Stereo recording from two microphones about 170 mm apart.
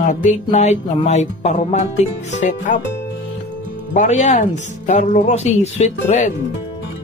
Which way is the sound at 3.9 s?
45° left (ahead or behind).